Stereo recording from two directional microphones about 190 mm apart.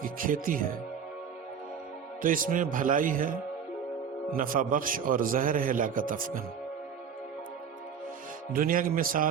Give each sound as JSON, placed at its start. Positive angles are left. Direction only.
{"t": 0.0, "sound": "speech", "side_deg": -45}
{"t": 2.2, "sound": "a man's voice", "side_deg": -45}
{"t": 8.5, "sound": "a man's voice", "side_deg": -50}